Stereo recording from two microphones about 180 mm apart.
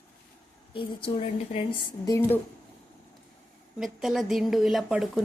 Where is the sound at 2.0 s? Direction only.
15° left (ahead or behind).